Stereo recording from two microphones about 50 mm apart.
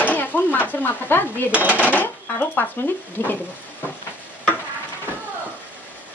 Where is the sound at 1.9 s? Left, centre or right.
Left.